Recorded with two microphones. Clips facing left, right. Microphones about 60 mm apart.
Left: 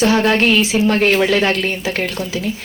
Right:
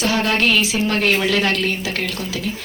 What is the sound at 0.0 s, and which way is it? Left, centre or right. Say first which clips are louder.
A woman's voice: left 5 dB; left.